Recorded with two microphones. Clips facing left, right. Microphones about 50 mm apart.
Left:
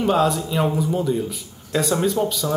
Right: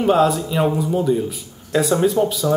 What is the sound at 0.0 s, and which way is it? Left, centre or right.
Speech, centre.